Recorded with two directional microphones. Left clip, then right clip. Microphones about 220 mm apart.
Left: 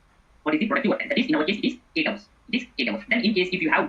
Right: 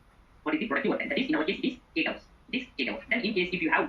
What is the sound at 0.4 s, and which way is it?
Speech, 55° left (ahead or behind).